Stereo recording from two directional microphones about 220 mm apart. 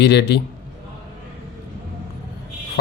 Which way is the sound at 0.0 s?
50° left (ahead or behind).